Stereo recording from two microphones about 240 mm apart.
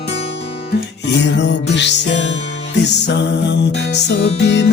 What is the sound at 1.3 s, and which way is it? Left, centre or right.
Music, left.